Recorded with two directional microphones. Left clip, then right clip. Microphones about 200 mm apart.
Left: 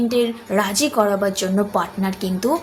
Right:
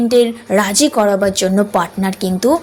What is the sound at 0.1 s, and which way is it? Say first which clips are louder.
A woman's voice: right 7 dB; 35° right (ahead or behind).